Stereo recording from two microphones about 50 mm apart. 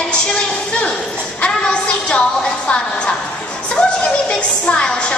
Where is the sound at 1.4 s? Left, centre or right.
Left.